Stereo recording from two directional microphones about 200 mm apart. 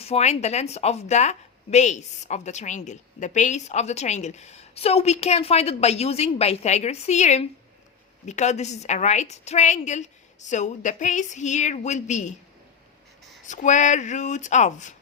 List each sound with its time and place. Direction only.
0.0 s a woman's voice: 30° left (ahead or behind)
13.4 s a woman's voice: 40° left (ahead or behind)